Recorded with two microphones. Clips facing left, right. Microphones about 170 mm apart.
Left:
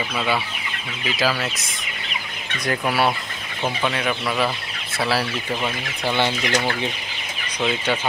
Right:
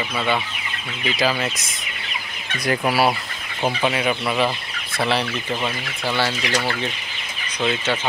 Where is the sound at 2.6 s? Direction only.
10° right (ahead or behind).